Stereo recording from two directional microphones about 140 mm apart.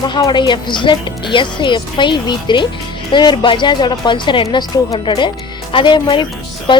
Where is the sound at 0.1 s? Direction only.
30° left (ahead or behind).